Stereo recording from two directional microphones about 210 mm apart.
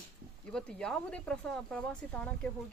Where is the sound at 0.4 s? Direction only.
5° left (ahead or behind).